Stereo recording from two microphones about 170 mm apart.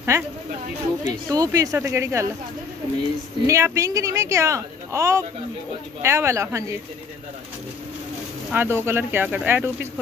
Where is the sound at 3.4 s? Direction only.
20° right (ahead or behind).